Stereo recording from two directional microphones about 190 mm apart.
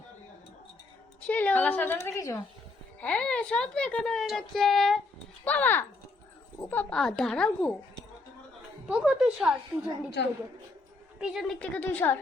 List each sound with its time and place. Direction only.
1.3 s a woman's voice: 10° left (ahead or behind)
3.0 s a woman's voice: 5° left (ahead or behind)
8.9 s a woman's voice: 5° right (ahead or behind)
10.2 s a woman's voice: 60° left (ahead or behind)
11.2 s a woman's voice: centre (ahead or behind)